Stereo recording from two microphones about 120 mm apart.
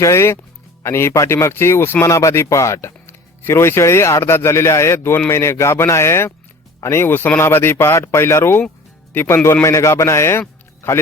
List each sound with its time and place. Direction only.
0.0 s speech: 25° left (ahead or behind)